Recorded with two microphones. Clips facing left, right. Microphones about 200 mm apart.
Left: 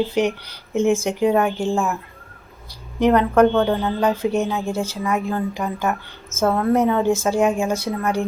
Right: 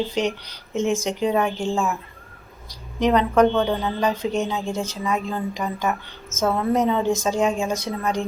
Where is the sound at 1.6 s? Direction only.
15° left (ahead or behind).